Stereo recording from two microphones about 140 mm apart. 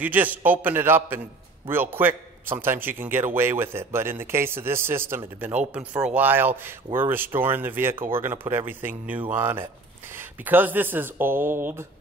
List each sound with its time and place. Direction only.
0.0 s a man's voice: 10° right (ahead or behind)